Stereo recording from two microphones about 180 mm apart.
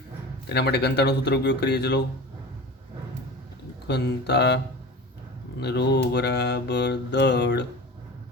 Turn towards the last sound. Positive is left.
turn(degrees=70)  # may be behind; listen again after turning